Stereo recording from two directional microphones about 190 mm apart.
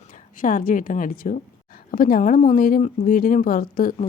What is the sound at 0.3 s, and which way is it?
Speech, 45° left (ahead or behind).